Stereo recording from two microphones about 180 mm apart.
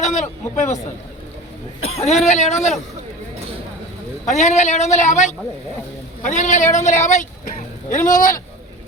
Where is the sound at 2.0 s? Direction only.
35° left (ahead or behind).